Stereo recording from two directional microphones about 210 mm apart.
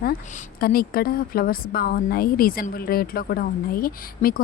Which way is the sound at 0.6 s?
45° left (ahead or behind).